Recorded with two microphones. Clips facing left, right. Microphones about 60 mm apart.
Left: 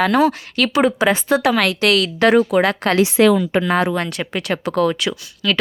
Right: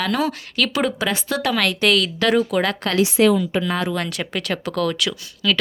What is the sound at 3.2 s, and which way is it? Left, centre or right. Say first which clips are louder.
Speech: left 1 dB; left.